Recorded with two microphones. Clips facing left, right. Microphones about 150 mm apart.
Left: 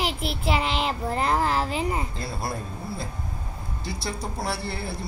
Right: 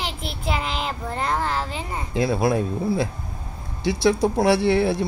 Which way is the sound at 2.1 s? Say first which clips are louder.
Right 11 dB; 90° right.